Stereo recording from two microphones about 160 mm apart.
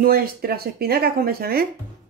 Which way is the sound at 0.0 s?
70° right (ahead or behind).